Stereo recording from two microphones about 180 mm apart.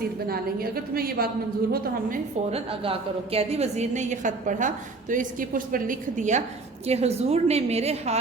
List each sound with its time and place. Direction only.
0.3 s a woman's voice: 55° right (ahead or behind)
2.5 s a woman's voice: 30° right (ahead or behind)